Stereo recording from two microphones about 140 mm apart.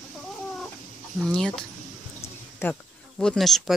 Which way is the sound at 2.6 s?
15° left (ahead or behind).